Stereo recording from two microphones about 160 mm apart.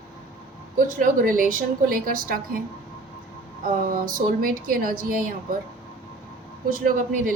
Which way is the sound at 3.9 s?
60° right (ahead or behind).